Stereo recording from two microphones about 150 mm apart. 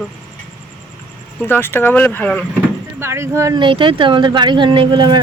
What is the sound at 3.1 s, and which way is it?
Speech, 20° right (ahead or behind).